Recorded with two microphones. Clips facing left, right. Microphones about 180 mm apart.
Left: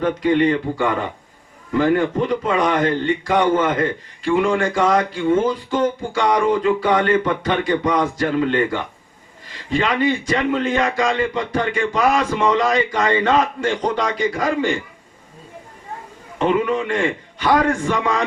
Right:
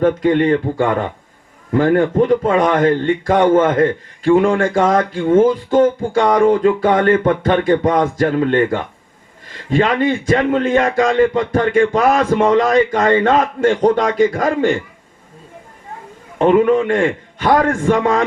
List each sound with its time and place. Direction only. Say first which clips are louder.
0.0 s a man's voice: right 3 dB; 50° right (ahead or behind)
16.4 s a man's voice: right 7 dB; 50° right (ahead or behind)